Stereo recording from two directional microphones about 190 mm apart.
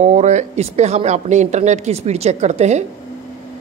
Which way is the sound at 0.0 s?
40° right (ahead or behind).